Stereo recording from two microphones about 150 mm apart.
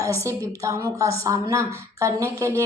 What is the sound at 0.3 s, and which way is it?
A woman's voice, 20° right (ahead or behind).